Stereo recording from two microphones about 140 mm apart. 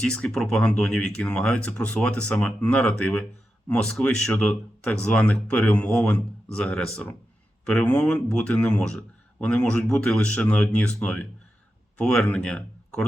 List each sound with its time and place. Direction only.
0.0 s speech: 5° left (ahead or behind)